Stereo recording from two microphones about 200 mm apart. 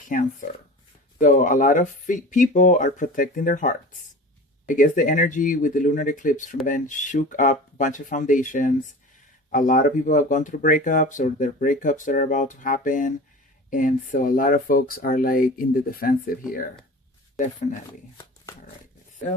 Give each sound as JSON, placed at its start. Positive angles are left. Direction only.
{"t": 0.1, "sound": "speech", "side_deg": 40}